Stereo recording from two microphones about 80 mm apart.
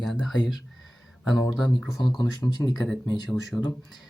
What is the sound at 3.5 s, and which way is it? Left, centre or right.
Speech, centre.